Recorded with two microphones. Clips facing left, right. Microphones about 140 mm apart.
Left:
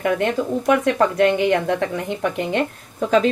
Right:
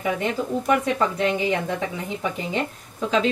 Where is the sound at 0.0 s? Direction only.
70° left (ahead or behind).